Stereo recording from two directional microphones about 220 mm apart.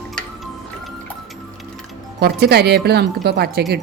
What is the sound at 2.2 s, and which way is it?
Speech, 45° right (ahead or behind).